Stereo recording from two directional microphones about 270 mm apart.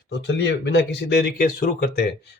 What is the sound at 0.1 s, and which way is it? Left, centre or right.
Speech, left.